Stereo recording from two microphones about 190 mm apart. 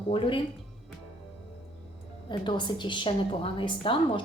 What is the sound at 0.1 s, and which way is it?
Speech, 25° left (ahead or behind).